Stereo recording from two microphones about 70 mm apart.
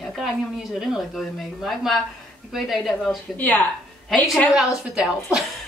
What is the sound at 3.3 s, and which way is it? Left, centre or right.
Speech, left.